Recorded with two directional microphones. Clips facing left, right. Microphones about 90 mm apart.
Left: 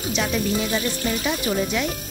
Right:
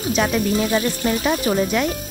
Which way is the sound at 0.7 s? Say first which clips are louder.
Right 4 dB; 50° right (ahead or behind).